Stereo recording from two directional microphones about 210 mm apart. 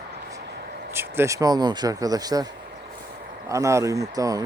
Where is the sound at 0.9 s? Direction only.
10° right (ahead or behind).